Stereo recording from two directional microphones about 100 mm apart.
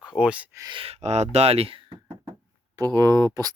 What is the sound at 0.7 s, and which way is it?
Speech, 65° right (ahead or behind).